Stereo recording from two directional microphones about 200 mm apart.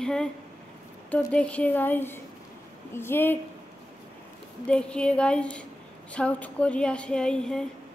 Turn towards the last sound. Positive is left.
turn(degrees=5)  # may be behind; listen again after turning